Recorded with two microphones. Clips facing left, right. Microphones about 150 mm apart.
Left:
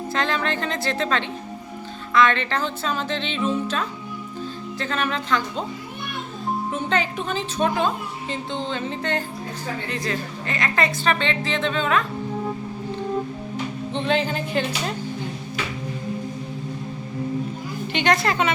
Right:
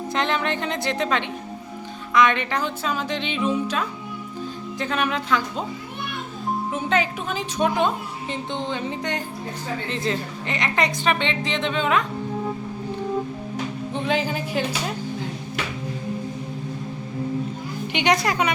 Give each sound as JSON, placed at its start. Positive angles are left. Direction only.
{"t": 0.1, "sound": "a woman's voice", "side_deg": -20}
{"t": 6.7, "sound": "a woman's voice", "side_deg": -10}
{"t": 13.9, "sound": "a woman's voice", "side_deg": -10}
{"t": 17.9, "sound": "a woman's voice", "side_deg": -15}